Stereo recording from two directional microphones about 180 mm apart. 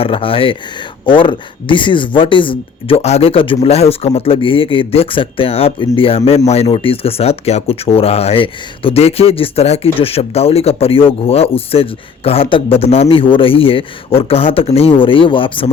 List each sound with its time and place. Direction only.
0.0 s speech: 30° left (ahead or behind)